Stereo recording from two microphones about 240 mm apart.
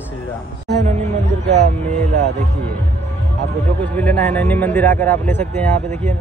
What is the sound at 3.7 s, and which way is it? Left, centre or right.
A man's voice, centre.